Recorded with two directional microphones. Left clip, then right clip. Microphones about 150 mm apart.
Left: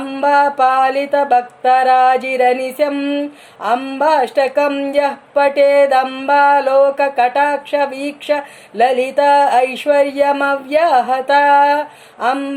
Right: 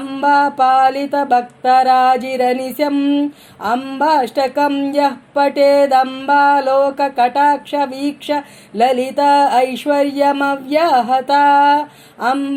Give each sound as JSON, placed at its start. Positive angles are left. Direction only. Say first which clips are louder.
{"t": 0.1, "sound": "music", "louder": "even", "side_deg": -35}